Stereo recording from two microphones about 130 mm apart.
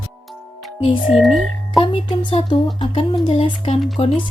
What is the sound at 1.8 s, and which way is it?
A woman's voice, 40° left (ahead or behind).